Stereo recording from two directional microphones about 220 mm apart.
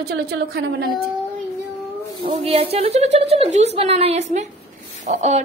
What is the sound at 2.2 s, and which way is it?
A woman's voice, 25° right (ahead or behind).